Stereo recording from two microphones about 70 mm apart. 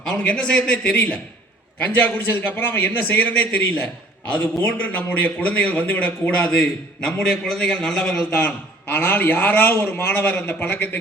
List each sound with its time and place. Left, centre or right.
0.0 s a man's voice: centre
8.3 s a man's voice: left